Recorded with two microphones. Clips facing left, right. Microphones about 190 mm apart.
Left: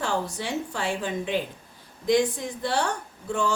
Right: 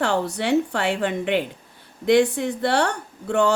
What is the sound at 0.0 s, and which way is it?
A woman's voice, 70° right (ahead or behind).